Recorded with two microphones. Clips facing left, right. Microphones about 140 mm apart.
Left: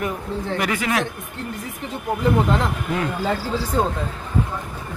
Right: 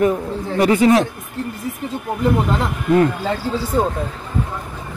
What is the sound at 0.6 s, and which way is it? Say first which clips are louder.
Speech: right 11 dB; 30° right (ahead or behind).